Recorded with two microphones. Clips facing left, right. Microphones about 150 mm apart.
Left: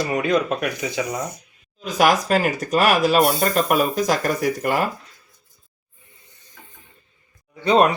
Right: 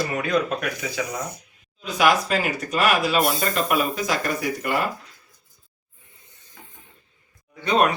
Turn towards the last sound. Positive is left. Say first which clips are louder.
# left 4 dB
turn(degrees=30)  # may be behind; listen again after turning